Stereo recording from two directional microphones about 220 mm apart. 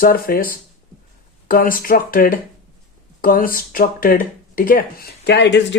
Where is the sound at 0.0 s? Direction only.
40° left (ahead or behind).